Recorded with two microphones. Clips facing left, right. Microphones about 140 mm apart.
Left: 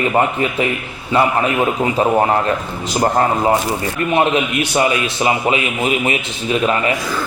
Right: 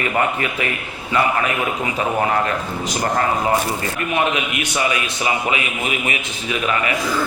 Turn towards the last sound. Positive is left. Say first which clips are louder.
# left 5 dB
turn(degrees=30)  # may be behind; listen again after turning